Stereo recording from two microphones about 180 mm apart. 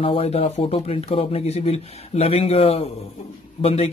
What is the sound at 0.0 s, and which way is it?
Speech, 30° left (ahead or behind).